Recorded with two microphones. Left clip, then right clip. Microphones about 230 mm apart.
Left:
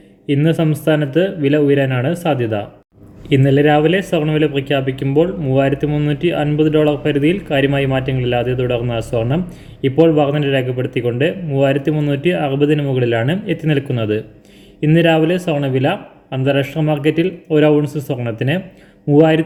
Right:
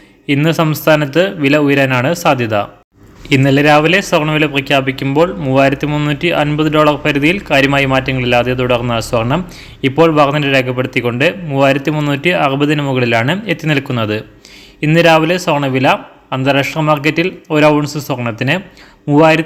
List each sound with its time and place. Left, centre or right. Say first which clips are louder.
0.3 s a man's voice: right 3 dB; centre
19.0 s speech: right 2 dB; right